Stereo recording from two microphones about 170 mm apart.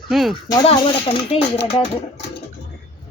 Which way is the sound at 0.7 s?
35° left (ahead or behind).